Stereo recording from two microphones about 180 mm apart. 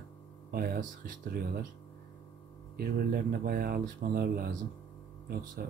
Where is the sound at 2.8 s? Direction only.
55° right (ahead or behind).